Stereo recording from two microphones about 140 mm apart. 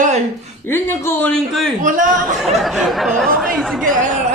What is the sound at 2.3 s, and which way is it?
Speech, centre (ahead or behind).